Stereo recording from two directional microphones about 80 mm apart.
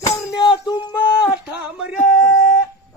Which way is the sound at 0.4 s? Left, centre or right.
Left.